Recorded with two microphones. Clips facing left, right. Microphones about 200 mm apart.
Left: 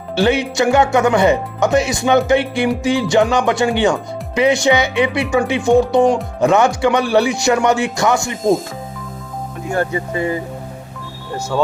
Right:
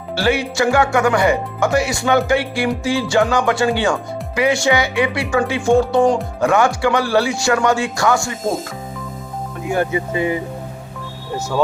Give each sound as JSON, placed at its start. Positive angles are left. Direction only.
{"t": 0.2, "sound": "speech", "side_deg": 20}
{"t": 9.9, "sound": "speech", "side_deg": -15}